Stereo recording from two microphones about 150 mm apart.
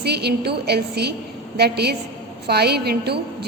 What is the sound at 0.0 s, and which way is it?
A woman's voice, 90° right.